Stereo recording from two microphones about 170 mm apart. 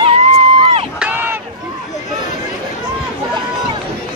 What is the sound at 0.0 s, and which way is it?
Run, 35° right (ahead or behind).